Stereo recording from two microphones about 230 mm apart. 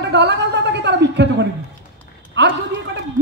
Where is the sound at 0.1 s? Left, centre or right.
Right.